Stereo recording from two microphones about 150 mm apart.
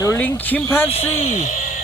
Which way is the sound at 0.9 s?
40° left (ahead or behind).